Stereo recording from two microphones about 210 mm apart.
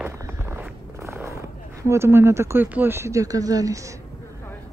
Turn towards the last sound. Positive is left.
turn(degrees=-15)  # may be behind; listen again after turning